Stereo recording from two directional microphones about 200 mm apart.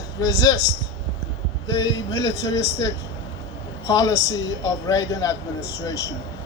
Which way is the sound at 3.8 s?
15° left (ahead or behind).